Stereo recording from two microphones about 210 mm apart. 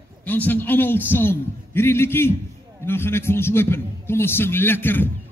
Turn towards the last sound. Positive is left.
turn(degrees=10)  # may be behind; listen again after turning